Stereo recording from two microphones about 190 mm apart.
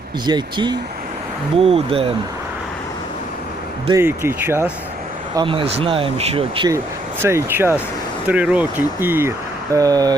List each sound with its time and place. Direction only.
0.3 s speech: 25° right (ahead or behind)
3.8 s speech: 15° right (ahead or behind)
5.4 s speech: 25° right (ahead or behind)
7.2 s speech: 10° right (ahead or behind)